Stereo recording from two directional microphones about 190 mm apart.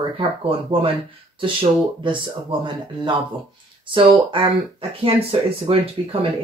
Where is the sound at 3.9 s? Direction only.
25° right (ahead or behind).